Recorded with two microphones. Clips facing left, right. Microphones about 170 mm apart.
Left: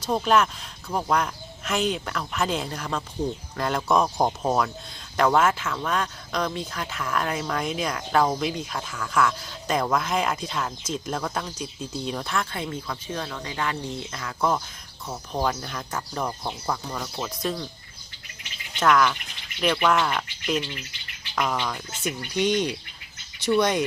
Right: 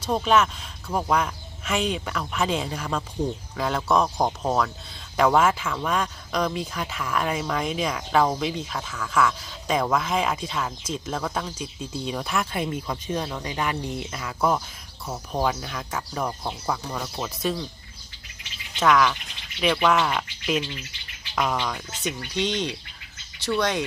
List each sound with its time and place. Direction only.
0.0 s speech: centre (ahead or behind)
18.8 s speech: centre (ahead or behind)
22.2 s speech: 10° left (ahead or behind)